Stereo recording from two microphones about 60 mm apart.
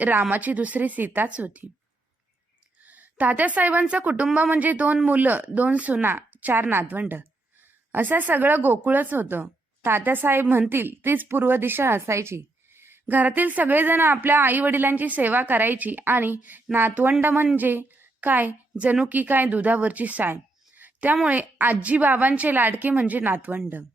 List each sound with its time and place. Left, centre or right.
0.0 s a woman's voice: right
2.8 s a woman's voice: right
20.3 s a sound: right
21.2 s a woman's voice: right